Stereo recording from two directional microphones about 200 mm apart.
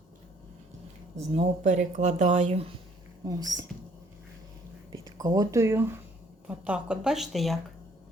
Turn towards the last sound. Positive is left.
turn(degrees=0)  # may be behind; listen again after turning